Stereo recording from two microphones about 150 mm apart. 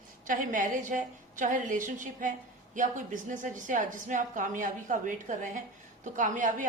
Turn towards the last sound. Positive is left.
turn(degrees=-60)  # may be behind; listen again after turning